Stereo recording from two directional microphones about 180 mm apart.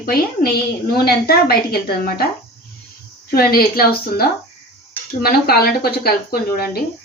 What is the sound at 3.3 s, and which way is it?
Speech, 55° left (ahead or behind).